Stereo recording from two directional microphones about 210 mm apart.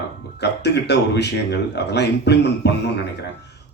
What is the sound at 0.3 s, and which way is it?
Speech, 50° left (ahead or behind).